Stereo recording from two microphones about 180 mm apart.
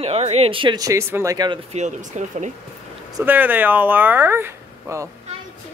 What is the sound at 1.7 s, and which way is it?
Speech, 40° right (ahead or behind).